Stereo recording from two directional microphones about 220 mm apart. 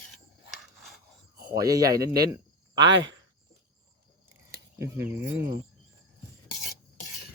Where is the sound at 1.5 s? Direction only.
15° right (ahead or behind).